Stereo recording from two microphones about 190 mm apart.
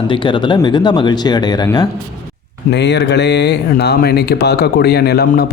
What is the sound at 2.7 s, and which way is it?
Speech, 65° left (ahead or behind).